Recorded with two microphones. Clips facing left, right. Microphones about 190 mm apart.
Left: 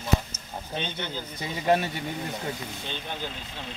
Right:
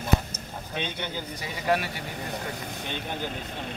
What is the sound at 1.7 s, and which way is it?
Speech, 25° left (ahead or behind).